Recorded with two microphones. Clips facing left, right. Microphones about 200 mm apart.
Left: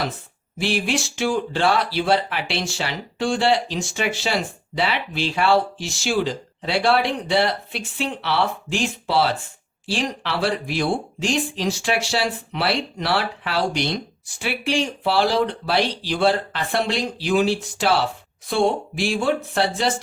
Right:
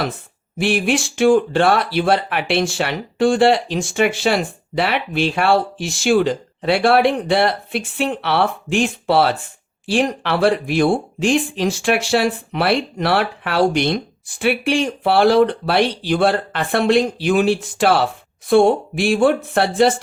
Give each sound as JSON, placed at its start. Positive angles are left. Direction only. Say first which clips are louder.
{"t": 0.6, "sound": "speech", "louder": "right 5 dB", "side_deg": -55}